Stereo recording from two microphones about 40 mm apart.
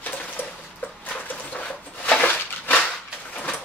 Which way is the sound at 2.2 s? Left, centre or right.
Left.